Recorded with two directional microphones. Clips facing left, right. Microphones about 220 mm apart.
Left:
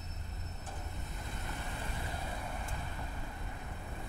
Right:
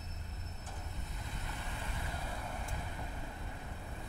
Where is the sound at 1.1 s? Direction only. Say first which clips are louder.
Left 3 dB; 50° left (ahead or behind).